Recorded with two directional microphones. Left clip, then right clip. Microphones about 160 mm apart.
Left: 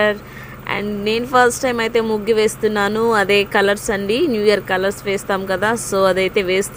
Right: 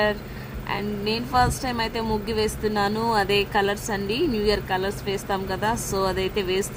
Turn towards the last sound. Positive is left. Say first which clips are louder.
# left 8 dB
turn(degrees=20)  # may be behind; listen again after turning